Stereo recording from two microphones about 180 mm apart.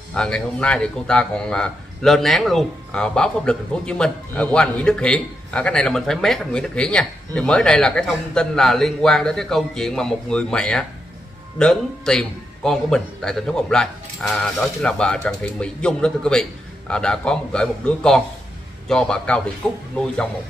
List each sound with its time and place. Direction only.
0.1 s speech: 5° left (ahead or behind)